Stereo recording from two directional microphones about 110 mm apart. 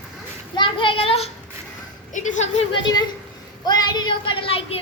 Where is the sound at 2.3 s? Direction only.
90° left.